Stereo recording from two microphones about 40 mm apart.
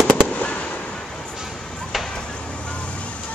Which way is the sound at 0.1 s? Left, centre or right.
Left.